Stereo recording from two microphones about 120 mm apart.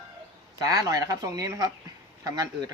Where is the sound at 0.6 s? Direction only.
30° right (ahead or behind).